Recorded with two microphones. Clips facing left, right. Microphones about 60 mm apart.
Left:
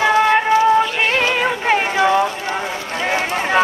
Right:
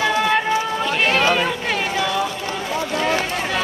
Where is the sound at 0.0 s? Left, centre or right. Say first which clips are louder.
Left 4 dB; left.